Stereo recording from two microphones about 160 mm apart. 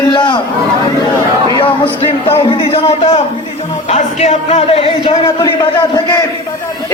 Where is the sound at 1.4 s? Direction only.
30° left (ahead or behind).